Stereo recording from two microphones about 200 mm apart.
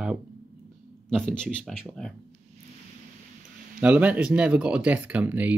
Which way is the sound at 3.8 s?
5° right (ahead or behind).